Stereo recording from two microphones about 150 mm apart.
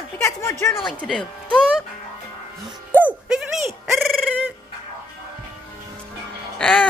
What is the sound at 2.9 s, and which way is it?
Sheep, 10° right (ahead or behind).